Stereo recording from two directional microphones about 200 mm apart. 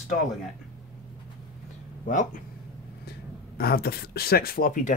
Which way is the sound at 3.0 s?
50° left (ahead or behind).